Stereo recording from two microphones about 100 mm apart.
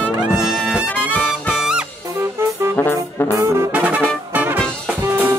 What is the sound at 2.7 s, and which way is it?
Brass instrument, 20° left (ahead or behind).